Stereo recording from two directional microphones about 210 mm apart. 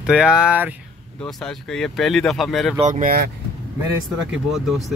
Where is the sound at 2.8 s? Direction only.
40° right (ahead or behind).